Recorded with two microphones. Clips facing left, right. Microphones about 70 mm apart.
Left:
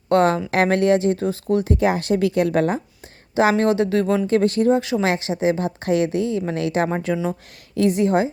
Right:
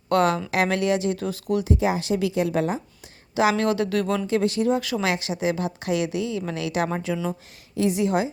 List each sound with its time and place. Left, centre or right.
0.1 s a woman's voice: left
1.7 s speech: left
3.5 s speech: left
4.3 s speech: left
4.7 s a woman's voice: left
7.8 s a woman's voice: left